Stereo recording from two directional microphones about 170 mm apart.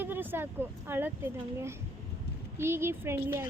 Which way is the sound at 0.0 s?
10° right (ahead or behind).